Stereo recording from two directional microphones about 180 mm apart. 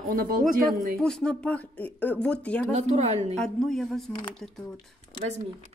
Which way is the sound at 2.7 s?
40° right (ahead or behind).